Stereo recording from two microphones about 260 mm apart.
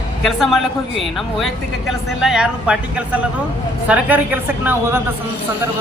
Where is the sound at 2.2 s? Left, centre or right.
Centre.